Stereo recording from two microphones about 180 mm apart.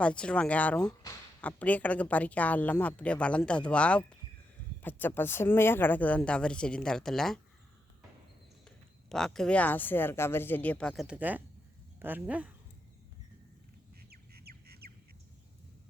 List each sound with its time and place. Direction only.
0.0 s speech: 5° left (ahead or behind)
9.0 s speech: 5° left (ahead or behind)
14.1 s bird: 60° right (ahead or behind)